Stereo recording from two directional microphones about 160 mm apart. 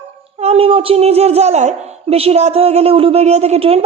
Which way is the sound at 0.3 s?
40° right (ahead or behind).